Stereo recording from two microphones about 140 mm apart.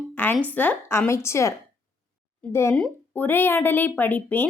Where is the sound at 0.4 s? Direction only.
10° left (ahead or behind).